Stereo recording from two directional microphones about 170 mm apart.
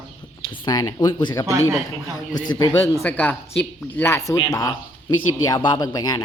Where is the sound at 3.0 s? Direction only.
10° left (ahead or behind).